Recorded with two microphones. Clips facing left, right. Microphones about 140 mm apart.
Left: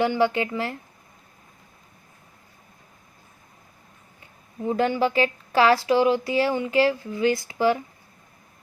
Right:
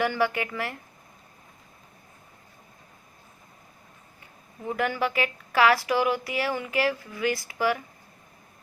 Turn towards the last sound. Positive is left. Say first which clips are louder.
# left 5 dB
turn(degrees=25)  # may be behind; listen again after turning